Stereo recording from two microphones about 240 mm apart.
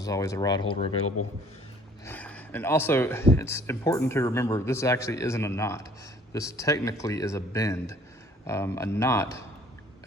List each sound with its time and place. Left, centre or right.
0.0 s speech: centre
1.0 s a man's voice: left
2.0 s speech: centre